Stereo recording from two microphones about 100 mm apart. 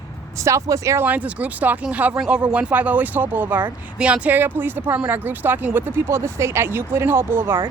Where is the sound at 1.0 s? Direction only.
15° right (ahead or behind).